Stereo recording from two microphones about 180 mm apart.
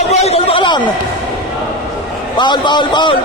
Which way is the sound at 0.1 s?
35° left (ahead or behind).